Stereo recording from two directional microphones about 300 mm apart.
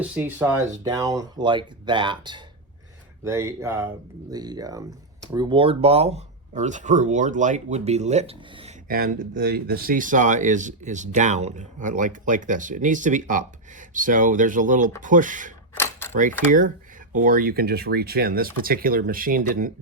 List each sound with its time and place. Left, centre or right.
0.0 s speech: centre; by 15.5 s right
15.7 s camera: centre
16.1 s speech: right